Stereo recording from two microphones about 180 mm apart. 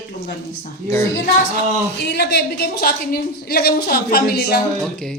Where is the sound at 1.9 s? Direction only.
70° left (ahead or behind).